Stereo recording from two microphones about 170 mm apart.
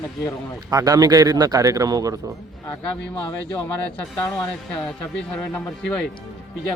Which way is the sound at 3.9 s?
5° left (ahead or behind).